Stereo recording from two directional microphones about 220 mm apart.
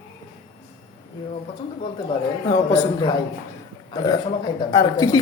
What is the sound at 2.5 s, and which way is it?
Speech, 15° left (ahead or behind).